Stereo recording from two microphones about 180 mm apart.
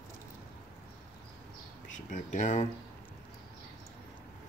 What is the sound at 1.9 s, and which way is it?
Speech, 45° left (ahead or behind).